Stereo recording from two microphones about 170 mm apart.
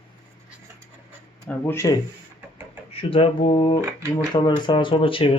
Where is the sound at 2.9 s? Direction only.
35° left (ahead or behind).